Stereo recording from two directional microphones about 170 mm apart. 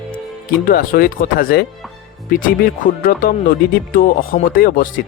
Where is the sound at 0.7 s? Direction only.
60° left (ahead or behind).